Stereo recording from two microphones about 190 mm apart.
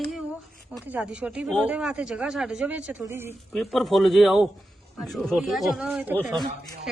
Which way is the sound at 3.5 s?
Centre (ahead or behind).